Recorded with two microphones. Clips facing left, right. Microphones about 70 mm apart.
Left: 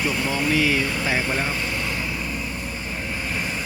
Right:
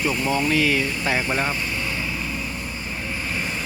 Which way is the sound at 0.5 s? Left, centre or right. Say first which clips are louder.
Even; centre.